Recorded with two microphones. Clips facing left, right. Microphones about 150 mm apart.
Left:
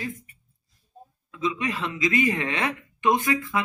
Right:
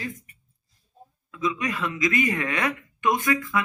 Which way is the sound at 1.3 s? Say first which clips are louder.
Even; 25° left (ahead or behind).